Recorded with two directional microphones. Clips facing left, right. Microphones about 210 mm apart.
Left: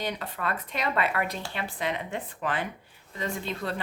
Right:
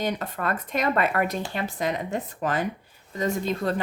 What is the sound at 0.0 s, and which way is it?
Speech, 45° right (ahead or behind).